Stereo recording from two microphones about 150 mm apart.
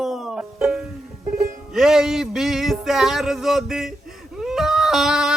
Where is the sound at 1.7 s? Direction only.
5° right (ahead or behind).